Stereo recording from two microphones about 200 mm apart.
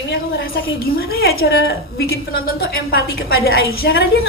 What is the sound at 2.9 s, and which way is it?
Speech, 50° left (ahead or behind).